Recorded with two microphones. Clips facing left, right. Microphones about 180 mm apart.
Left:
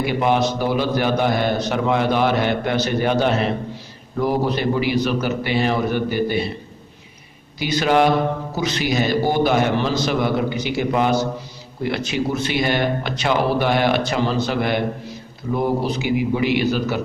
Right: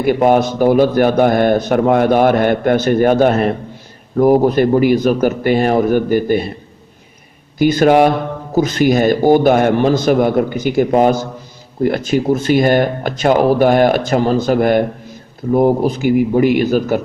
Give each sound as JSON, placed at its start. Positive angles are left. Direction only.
{"t": 0.0, "sound": "a man's voice", "side_deg": -45}
{"t": 7.6, "sound": "a man's voice", "side_deg": -50}